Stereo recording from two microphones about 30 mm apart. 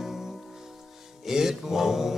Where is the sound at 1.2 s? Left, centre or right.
Centre.